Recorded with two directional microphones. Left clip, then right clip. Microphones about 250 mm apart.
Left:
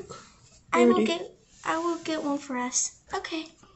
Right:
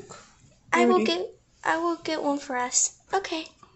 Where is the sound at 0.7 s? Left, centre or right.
Right.